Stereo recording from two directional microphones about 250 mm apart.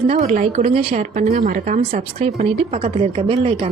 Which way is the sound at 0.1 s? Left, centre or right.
Right.